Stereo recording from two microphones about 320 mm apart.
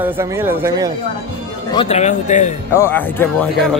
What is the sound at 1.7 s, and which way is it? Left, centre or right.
Speech, centre.